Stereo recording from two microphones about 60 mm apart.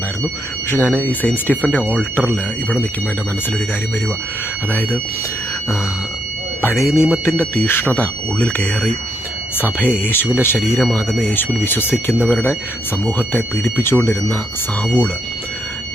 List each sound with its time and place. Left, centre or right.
0.7 s speech: left
2.3 s speech: right
6.6 s speech: left
7.3 s speech: left